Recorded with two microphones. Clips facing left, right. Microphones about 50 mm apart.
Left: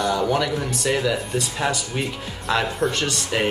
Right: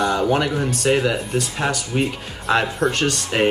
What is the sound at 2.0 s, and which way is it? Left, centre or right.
Speech, right.